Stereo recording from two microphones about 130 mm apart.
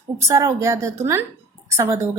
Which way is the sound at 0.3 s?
20° right (ahead or behind).